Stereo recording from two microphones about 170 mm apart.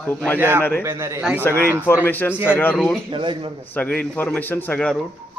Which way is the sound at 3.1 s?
30° right (ahead or behind).